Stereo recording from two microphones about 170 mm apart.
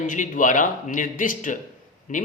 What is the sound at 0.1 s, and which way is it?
Speech, 50° left (ahead or behind).